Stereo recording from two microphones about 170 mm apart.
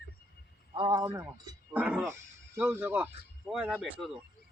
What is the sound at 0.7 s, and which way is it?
Speech, 25° right (ahead or behind).